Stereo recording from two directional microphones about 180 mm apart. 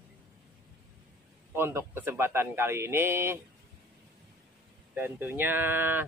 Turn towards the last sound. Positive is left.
turn(degrees=-10)  # may be behind; listen again after turning